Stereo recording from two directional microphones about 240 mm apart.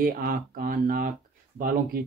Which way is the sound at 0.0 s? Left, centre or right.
Right.